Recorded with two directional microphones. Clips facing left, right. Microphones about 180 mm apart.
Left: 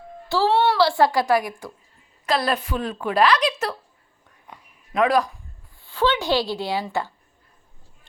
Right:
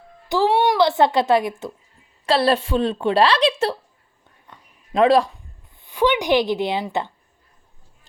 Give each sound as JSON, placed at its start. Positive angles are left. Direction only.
{"t": 0.3, "sound": "a woman's voice", "side_deg": -15}
{"t": 4.9, "sound": "a woman's voice", "side_deg": -30}
{"t": 5.8, "sound": "a woman's voice", "side_deg": -15}